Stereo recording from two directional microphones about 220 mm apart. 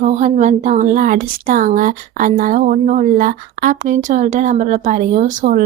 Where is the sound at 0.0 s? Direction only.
30° right (ahead or behind).